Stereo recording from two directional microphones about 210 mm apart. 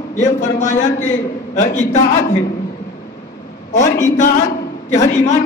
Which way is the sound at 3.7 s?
35° left (ahead or behind).